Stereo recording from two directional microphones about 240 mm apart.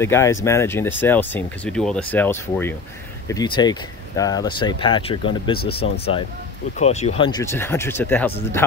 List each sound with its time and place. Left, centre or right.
0.0 s speech: centre
5.6 s speech: left
6.8 s speech: left; by 8.6 s centre